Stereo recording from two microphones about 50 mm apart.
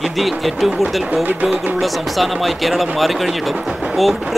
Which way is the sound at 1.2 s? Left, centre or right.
Right.